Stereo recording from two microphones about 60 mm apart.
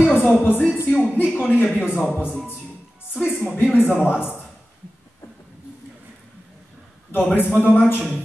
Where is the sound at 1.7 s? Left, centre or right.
Left.